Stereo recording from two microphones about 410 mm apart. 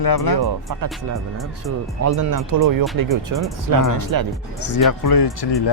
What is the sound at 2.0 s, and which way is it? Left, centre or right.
Speech, right.